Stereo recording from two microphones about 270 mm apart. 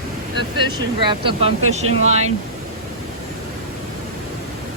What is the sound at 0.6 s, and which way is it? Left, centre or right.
Speech, centre.